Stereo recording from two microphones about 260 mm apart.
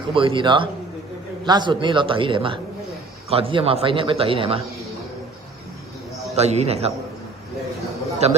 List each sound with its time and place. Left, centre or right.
0.1 s a man's voice: centre
6.3 s a man's voice: right
8.2 s a man's voice: right